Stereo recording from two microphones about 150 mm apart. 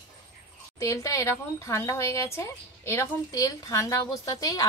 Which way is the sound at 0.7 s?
20° left (ahead or behind).